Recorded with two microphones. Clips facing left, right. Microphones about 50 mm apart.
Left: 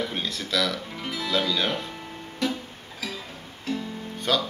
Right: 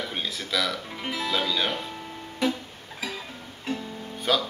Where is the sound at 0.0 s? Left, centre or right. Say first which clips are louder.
Left 2 dB; centre.